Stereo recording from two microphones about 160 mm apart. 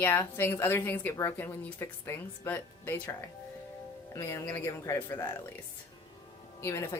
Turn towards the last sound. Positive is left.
turn(degrees=15)  # may be behind; listen again after turning